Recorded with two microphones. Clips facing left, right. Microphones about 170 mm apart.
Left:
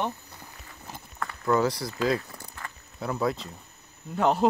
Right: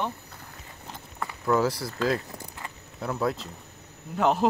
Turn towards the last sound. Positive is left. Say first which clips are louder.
# even
turn(degrees=0)  # may be behind; listen again after turning